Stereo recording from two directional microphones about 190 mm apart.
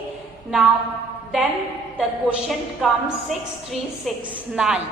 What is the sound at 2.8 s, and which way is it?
A woman's voice, centre (ahead or behind).